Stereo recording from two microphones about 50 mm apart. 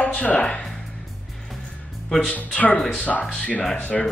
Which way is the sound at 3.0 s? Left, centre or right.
Left.